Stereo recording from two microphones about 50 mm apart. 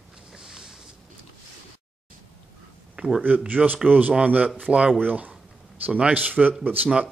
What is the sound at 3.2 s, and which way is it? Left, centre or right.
Speech, right.